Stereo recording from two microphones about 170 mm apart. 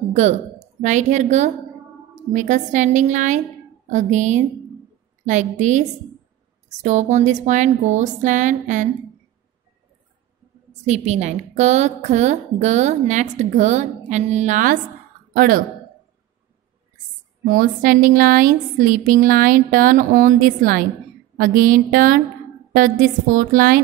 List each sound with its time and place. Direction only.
0.1 s a woman's voice: 45° right (ahead or behind)
10.9 s a woman's voice: 45° right (ahead or behind)
17.5 s a woman's voice: 55° right (ahead or behind)